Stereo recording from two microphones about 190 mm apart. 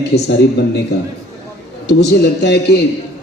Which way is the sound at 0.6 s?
60° left (ahead or behind).